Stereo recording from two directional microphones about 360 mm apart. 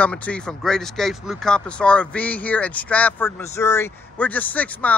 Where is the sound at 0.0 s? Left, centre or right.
Centre.